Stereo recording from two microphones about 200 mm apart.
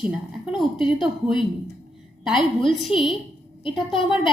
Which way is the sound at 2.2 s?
Centre (ahead or behind).